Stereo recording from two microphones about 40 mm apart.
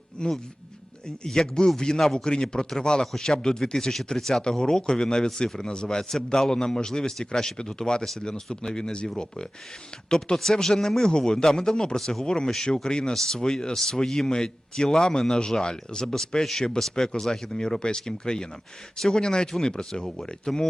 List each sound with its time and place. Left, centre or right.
0.2 s a man's voice: left
10.1 s a man's voice: centre
11.9 s a man's voice: centre
12.2 s a man's voice: centre
19.2 s a man's voice: centre